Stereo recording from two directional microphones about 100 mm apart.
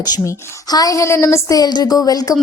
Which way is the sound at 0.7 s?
35° left (ahead or behind).